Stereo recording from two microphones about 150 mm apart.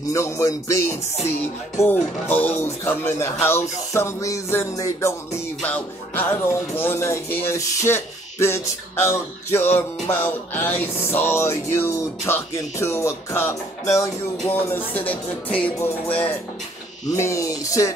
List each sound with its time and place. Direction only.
0.1 s music: 20° left (ahead or behind)
5.6 s music: 10° left (ahead or behind)